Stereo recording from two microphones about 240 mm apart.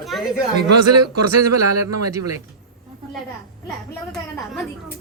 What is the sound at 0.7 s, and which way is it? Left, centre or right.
A man's voice, right.